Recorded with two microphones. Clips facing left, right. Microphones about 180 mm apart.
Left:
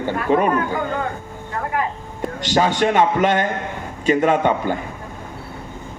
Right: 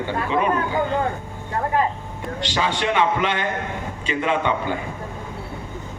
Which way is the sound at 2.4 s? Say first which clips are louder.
Left 6 dB; 45° left (ahead or behind).